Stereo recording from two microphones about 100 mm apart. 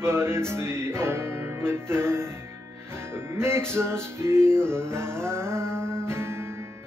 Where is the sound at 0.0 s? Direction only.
25° right (ahead or behind).